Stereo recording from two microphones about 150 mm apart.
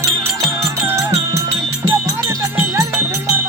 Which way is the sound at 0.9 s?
20° right (ahead or behind).